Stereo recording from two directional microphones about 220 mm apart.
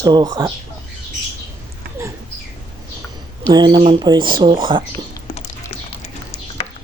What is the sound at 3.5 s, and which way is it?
Speech, 20° right (ahead or behind).